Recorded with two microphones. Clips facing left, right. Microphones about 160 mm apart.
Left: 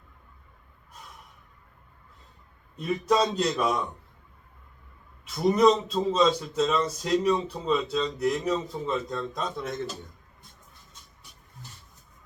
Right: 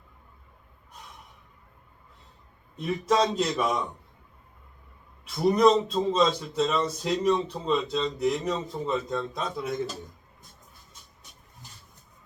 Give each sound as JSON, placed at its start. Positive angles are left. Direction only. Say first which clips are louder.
{"t": 2.7, "sound": "speech", "louder": "even", "side_deg": 0}
{"t": 5.2, "sound": "speech", "louder": "even", "side_deg": 0}